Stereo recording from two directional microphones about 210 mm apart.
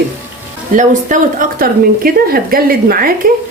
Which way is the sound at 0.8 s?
40° right (ahead or behind).